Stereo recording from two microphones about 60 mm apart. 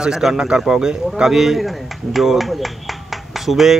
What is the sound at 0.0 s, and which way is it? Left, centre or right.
A man's voice, centre.